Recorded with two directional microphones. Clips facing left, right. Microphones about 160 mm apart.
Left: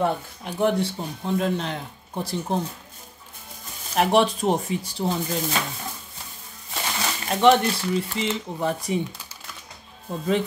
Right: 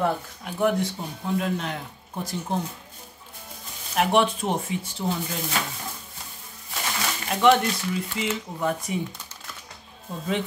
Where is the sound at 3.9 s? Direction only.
35° left (ahead or behind).